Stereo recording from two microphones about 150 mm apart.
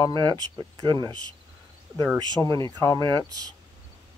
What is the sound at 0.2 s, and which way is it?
Speech, 30° right (ahead or behind).